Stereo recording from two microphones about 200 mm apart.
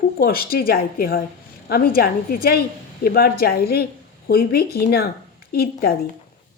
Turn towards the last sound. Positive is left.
turn(degrees=50)  # may be behind; listen again after turning